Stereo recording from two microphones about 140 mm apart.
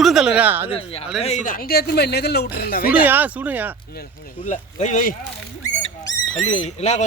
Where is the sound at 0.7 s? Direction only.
45° left (ahead or behind).